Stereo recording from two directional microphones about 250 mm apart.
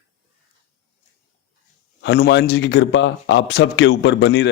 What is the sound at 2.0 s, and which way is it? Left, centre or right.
A man's voice, left.